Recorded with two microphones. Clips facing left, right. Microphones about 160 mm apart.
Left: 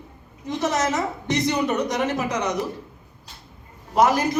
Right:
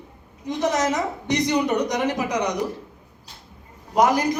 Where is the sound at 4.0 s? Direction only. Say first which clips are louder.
Even; 15° right (ahead or behind).